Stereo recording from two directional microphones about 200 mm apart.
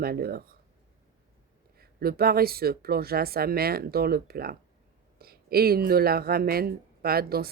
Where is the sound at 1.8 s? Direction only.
50° right (ahead or behind).